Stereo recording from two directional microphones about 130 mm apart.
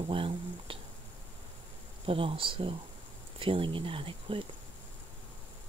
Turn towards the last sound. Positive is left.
turn(degrees=-45)  # may be behind; listen again after turning